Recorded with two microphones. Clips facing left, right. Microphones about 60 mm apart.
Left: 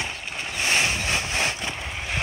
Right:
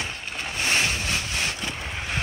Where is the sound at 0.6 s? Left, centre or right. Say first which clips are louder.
Left 1 dB; centre.